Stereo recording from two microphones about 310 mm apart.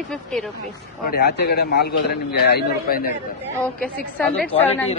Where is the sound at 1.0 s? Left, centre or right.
Left.